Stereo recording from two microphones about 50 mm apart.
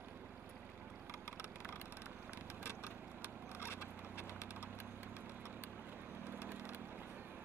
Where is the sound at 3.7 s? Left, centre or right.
Left.